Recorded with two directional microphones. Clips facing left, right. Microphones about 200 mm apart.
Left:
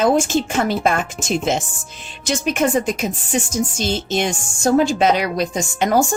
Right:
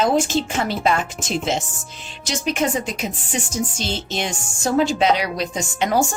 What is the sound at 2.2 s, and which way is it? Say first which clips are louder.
Speech: left 3 dB; 50° left (ahead or behind).